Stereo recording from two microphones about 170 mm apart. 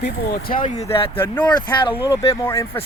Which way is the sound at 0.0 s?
65° left (ahead or behind).